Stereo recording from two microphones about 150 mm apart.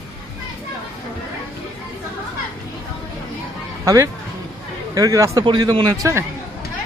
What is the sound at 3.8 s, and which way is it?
Speech, 20° right (ahead or behind).